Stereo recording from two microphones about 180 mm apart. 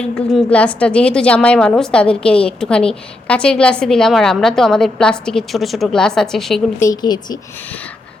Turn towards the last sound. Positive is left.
turn(degrees=20)  # may be behind; listen again after turning